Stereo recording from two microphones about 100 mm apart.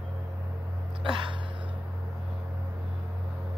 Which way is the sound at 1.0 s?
55° right (ahead or behind).